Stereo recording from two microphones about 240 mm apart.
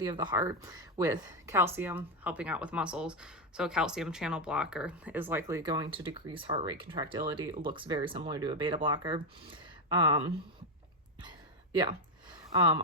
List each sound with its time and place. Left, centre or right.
0.1 s speech: centre
11.7 s speech: centre